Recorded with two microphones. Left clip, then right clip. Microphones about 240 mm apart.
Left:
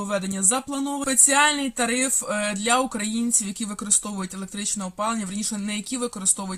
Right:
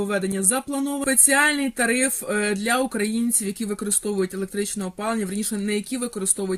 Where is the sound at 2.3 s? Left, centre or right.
Left.